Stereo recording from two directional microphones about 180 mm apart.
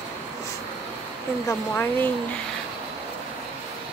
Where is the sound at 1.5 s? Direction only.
10° left (ahead or behind).